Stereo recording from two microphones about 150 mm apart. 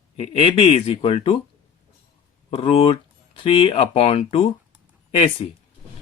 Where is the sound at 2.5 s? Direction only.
40° left (ahead or behind).